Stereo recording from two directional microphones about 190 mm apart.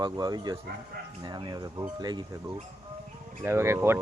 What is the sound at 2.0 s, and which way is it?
Speech, 20° right (ahead or behind).